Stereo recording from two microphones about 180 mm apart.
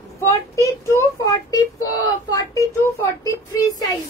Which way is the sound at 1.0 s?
20° left (ahead or behind).